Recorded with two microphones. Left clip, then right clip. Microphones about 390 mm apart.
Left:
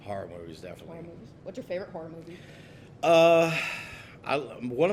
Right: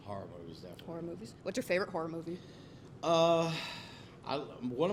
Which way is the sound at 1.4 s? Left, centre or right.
Right.